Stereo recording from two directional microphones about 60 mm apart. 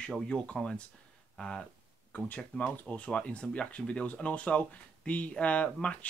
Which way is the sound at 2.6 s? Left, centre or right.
Left.